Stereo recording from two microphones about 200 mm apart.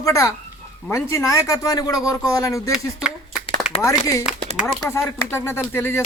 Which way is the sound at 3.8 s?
15° left (ahead or behind).